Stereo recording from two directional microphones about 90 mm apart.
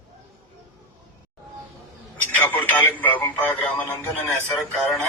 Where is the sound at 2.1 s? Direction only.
20° left (ahead or behind).